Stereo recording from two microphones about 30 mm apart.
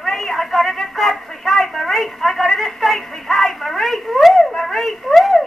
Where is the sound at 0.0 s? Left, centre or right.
Centre.